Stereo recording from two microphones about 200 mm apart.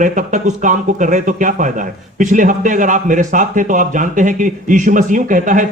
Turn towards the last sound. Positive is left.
turn(degrees=-40)  # may be behind; listen again after turning